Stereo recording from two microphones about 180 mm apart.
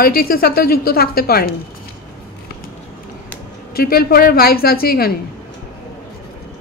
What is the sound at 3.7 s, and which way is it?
A woman's voice, 55° left (ahead or behind).